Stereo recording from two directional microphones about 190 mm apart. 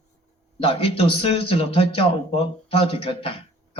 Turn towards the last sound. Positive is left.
turn(degrees=30)  # may be behind; listen again after turning